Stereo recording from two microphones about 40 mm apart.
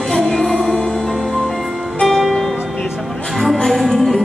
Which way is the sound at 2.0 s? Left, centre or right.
Centre.